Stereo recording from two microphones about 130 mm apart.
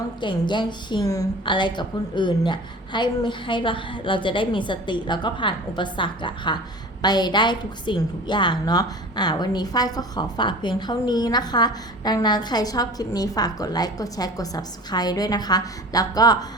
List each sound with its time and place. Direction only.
0.2 s a woman's voice: 35° left (ahead or behind)